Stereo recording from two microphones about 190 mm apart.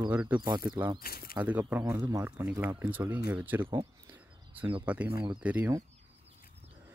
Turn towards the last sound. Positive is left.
turn(degrees=-10)  # may be behind; listen again after turning